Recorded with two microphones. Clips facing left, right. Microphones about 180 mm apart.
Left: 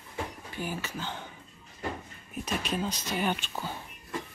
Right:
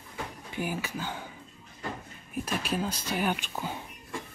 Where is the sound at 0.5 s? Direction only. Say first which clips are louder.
Right 5 dB; 10° right (ahead or behind).